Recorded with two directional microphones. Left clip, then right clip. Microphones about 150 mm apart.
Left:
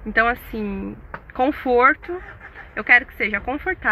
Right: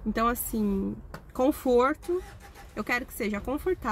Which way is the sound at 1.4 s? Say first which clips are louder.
Left 7 dB; 25° right (ahead or behind).